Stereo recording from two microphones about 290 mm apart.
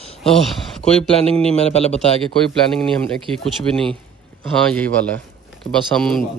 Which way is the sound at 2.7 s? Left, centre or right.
Centre.